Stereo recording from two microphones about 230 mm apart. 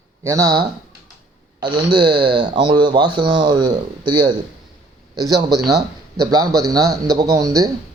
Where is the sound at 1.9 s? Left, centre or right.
Right.